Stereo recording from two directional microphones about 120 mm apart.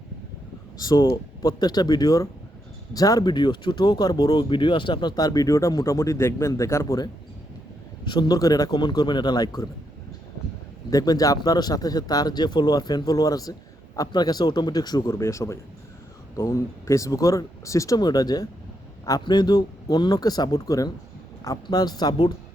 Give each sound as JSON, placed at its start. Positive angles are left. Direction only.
{"t": 0.8, "sound": "speech", "side_deg": 35}
{"t": 8.0, "sound": "speech", "side_deg": 40}
{"t": 10.9, "sound": "speech", "side_deg": 30}